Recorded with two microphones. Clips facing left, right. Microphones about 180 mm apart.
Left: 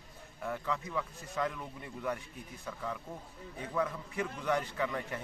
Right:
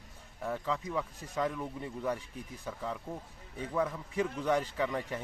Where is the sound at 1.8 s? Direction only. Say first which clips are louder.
Right 1 dB; 30° right (ahead or behind).